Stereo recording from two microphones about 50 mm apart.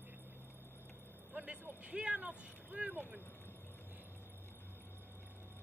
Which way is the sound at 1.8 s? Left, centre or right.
Right.